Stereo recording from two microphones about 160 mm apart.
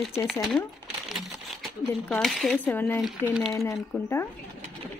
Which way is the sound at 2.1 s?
5° left (ahead or behind).